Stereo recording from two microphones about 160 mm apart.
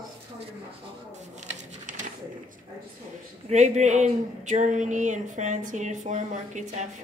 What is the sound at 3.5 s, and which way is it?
Speech, 45° right (ahead or behind).